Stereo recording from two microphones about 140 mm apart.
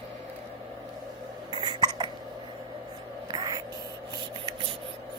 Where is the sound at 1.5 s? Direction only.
35° right (ahead or behind).